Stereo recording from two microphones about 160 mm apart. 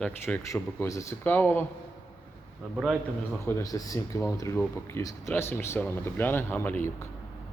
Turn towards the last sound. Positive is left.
turn(degrees=15)  # may be behind; listen again after turning